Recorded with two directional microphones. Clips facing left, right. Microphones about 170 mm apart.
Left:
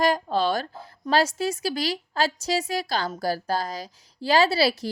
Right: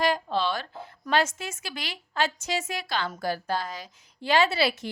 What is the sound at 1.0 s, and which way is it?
Speech, 35° left (ahead or behind).